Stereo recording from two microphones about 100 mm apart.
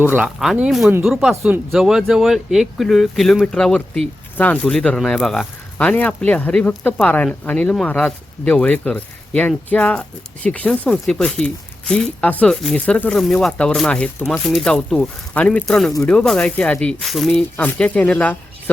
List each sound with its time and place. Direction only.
0.3 s speech: 5° right (ahead or behind); by 15.6 s 15° left (ahead or behind)
15.6 s speech: centre (ahead or behind)
17.0 s speech: centre (ahead or behind)
17.6 s speech: 15° left (ahead or behind)